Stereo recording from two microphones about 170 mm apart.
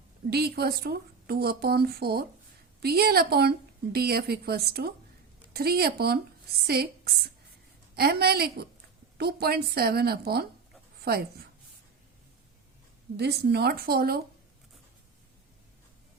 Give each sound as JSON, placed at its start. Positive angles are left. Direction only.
{"t": 0.3, "sound": "speech", "side_deg": -70}
{"t": 13.1, "sound": "speech", "side_deg": -75}